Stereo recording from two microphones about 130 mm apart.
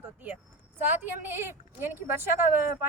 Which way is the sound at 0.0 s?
15° right (ahead or behind).